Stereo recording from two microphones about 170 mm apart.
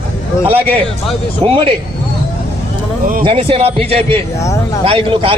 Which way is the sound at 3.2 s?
35° right (ahead or behind).